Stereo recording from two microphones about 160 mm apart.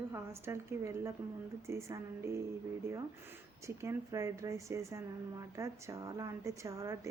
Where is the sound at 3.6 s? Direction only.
15° right (ahead or behind).